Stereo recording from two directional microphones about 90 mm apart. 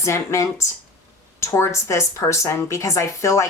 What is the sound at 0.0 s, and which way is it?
Speech, 35° left (ahead or behind).